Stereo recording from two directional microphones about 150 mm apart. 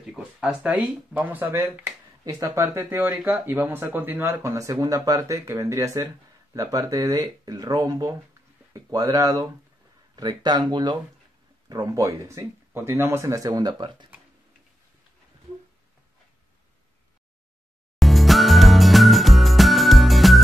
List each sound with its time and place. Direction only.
0.0 s speech: 5° right (ahead or behind); by 14.0 s 30° right (ahead or behind)
17.9 s music: centre (ahead or behind)